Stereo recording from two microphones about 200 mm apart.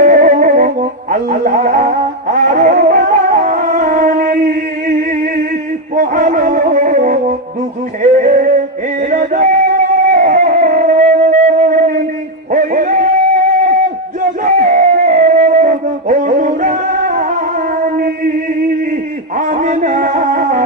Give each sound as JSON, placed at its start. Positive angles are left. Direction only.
{"t": 0.0, "sound": "music", "side_deg": -40}
{"t": 9.0, "sound": "music", "side_deg": -40}
{"t": 14.4, "sound": "a sound", "side_deg": -40}
{"t": 19.5, "sound": "music", "side_deg": -40}